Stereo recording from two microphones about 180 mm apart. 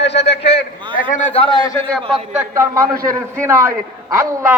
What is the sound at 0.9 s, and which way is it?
Speech, 50° left (ahead or behind).